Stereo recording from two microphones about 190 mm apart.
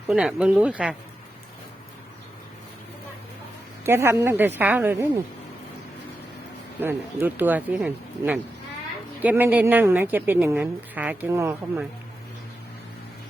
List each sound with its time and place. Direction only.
0.1 s speech: 5° right (ahead or behind)
3.8 s a woman's voice: 15° right (ahead or behind)
6.7 s a woman's voice: 10° right (ahead or behind)